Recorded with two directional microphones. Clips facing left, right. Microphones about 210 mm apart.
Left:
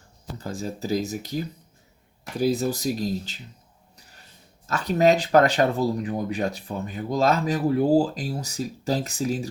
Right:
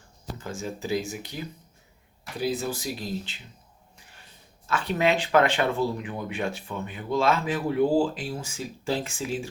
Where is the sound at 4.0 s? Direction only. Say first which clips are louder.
Left 1 dB; 40° left (ahead or behind).